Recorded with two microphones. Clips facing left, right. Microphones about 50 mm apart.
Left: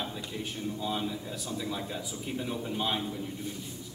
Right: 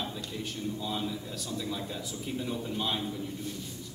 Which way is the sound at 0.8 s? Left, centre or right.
Centre.